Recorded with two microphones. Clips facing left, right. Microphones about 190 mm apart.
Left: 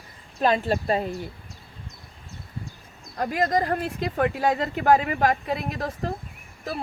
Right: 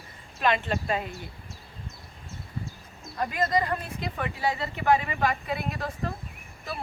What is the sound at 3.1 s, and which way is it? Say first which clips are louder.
Speech: left 3 dB; 45° left (ahead or behind).